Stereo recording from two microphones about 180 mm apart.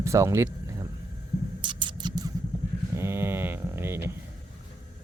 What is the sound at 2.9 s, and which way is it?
Mantra, 15° right (ahead or behind).